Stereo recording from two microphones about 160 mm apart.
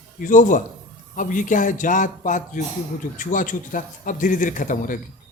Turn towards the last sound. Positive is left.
turn(degrees=55)  # may be behind; listen again after turning